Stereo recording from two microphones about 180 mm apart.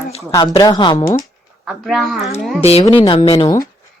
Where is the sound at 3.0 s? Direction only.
30° left (ahead or behind).